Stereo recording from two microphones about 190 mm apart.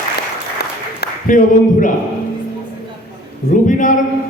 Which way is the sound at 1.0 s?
45° left (ahead or behind).